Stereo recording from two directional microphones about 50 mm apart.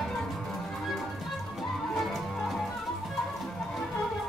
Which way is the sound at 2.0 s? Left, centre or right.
Centre.